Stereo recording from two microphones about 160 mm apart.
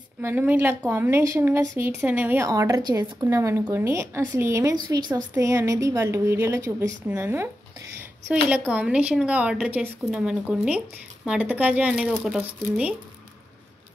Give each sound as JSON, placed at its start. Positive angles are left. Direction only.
{"t": 0.2, "sound": "a woman's voice", "side_deg": -10}